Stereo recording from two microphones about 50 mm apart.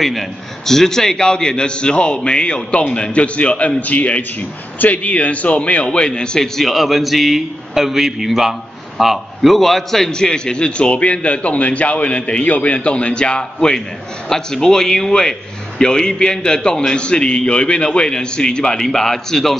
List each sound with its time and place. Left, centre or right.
0.0 s a man's voice: centre